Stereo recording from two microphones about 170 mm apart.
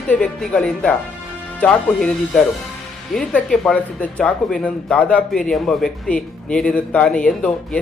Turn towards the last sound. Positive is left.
turn(degrees=5)  # may be behind; listen again after turning